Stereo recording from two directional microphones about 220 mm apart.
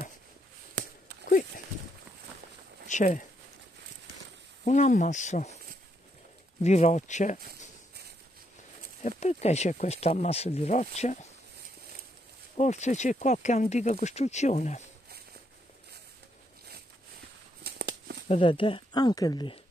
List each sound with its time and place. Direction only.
2.9 s speech: 35° left (ahead or behind)
4.6 s speech: 35° left (ahead or behind)
6.6 s speech: 30° left (ahead or behind)
9.2 s speech: 30° left (ahead or behind)
12.5 s speech: 30° left (ahead or behind)
17.6 s a sound: 50° right (ahead or behind)
18.3 s speech: 25° left (ahead or behind)